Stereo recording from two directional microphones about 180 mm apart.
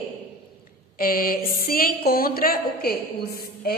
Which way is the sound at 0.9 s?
55° left (ahead or behind).